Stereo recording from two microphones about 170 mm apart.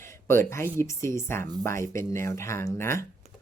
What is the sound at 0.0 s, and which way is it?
Speech, 15° left (ahead or behind).